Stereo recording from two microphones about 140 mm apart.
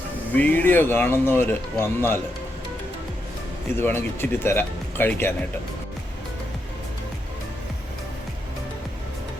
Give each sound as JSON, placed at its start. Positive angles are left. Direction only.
{"t": 0.3, "sound": "speech", "side_deg": 15}
{"t": 3.8, "sound": "speech", "side_deg": 15}